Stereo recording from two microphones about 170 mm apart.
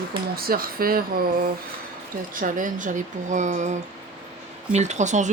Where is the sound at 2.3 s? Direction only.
50° right (ahead or behind).